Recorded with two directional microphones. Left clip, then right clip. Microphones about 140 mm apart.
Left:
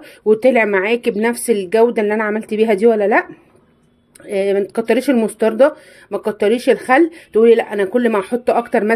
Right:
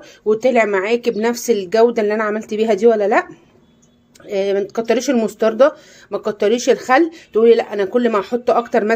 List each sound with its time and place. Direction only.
0.0 s speech: 30° left (ahead or behind)
4.3 s speech: 25° left (ahead or behind)